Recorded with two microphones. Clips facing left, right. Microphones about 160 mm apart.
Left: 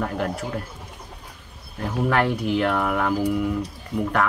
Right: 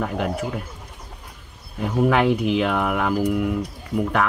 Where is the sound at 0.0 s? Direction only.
5° right (ahead or behind).